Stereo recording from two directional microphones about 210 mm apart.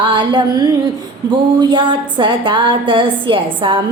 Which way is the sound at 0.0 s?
20° right (ahead or behind).